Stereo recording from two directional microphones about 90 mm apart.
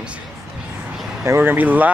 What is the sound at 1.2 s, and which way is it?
Speech, 25° right (ahead or behind).